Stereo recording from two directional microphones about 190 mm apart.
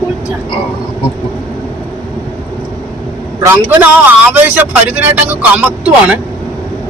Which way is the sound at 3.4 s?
10° right (ahead or behind).